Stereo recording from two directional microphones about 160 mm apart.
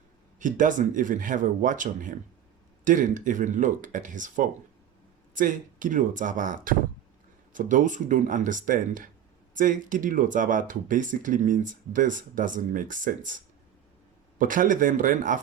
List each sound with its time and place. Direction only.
0.3 s speech: 55° right (ahead or behind)
14.3 s speech: 55° right (ahead or behind)